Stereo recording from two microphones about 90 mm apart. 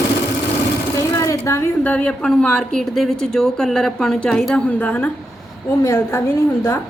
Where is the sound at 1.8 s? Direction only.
15° left (ahead or behind).